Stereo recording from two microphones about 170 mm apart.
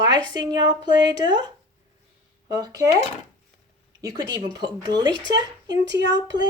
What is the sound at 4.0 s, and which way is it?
A woman's voice, 20° right (ahead or behind).